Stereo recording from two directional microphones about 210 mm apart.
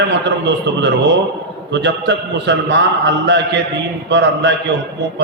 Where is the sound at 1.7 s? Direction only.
55° right (ahead or behind).